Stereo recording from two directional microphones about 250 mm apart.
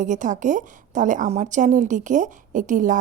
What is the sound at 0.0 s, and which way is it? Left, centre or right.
A woman's voice, right.